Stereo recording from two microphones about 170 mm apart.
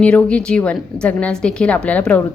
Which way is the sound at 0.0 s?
5° left (ahead or behind).